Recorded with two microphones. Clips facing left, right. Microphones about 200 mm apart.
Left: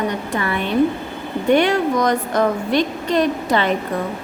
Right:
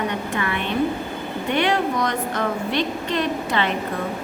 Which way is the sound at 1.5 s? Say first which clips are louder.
Left 6 dB; 45° left (ahead or behind).